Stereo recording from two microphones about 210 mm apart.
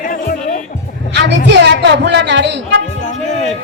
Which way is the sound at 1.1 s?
55° right (ahead or behind).